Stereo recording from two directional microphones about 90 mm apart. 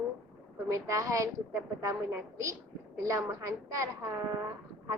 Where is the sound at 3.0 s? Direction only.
35° right (ahead or behind).